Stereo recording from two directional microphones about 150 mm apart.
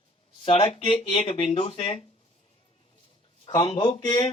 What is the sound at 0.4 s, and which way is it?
A man's voice, 40° left (ahead or behind).